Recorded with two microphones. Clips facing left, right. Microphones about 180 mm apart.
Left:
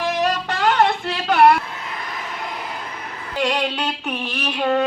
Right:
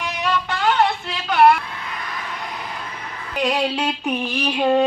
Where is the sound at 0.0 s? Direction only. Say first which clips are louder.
Left 3 dB; 40° left (ahead or behind).